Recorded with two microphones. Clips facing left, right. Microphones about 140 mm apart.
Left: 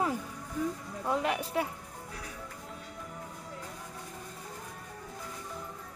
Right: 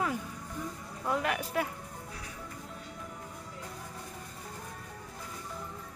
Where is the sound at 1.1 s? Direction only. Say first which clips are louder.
Left 1 dB; 25° left (ahead or behind).